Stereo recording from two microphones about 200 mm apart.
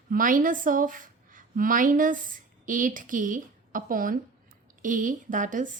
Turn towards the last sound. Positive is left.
turn(degrees=-40)  # may be behind; listen again after turning